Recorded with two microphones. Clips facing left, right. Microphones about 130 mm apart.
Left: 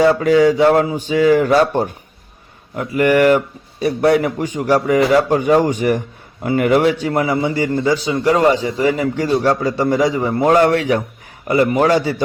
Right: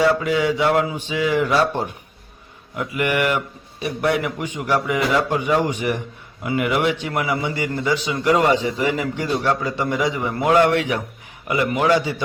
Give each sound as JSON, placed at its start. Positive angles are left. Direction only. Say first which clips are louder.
{"t": 0.2, "sound": "a man's voice", "louder": "left 8 dB", "side_deg": 40}